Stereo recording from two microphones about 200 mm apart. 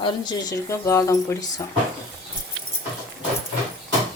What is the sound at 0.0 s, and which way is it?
Speech, 20° left (ahead or behind).